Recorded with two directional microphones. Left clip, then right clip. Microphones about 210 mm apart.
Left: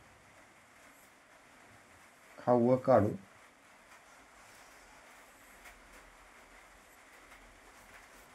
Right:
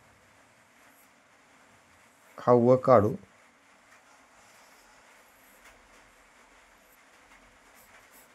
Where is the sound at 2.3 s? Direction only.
40° right (ahead or behind).